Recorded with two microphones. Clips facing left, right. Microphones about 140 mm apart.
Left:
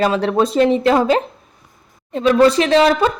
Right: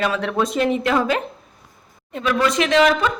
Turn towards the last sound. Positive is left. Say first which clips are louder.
# left 3 dB
turn(degrees=35)  # may be behind; listen again after turning